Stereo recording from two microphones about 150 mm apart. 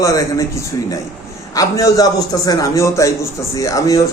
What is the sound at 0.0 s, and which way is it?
A man's voice, 20° left (ahead or behind).